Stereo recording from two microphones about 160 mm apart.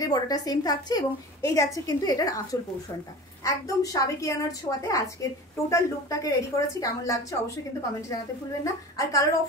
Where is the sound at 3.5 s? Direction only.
20° left (ahead or behind).